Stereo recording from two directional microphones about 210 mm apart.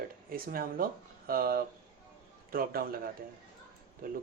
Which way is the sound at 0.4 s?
45° right (ahead or behind).